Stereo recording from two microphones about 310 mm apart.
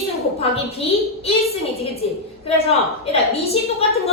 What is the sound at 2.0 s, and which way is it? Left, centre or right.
A woman's voice, centre.